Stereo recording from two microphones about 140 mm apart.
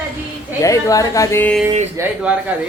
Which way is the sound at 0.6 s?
25° left (ahead or behind).